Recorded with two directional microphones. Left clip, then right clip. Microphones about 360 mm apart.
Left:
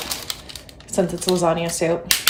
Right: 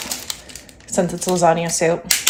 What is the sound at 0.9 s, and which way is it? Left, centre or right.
Speech, centre.